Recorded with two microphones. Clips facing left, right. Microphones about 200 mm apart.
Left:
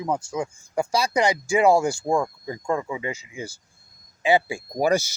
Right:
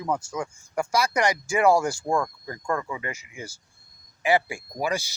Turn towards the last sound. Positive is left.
turn(degrees=40)  # may be behind; listen again after turning